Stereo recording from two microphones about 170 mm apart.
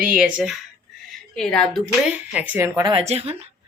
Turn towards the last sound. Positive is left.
turn(degrees=-40)  # may be behind; listen again after turning